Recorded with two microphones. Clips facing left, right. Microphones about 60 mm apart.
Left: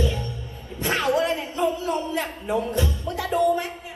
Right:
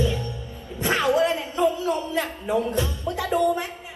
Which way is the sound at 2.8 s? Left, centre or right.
Right.